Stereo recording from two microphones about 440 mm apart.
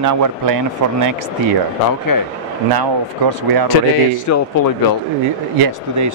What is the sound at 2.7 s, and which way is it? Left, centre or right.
Speech, right.